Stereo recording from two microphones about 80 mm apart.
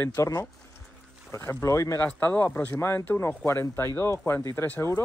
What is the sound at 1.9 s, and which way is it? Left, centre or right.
Speech, left.